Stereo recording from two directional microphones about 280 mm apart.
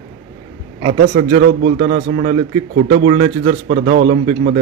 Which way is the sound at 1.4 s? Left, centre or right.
Right.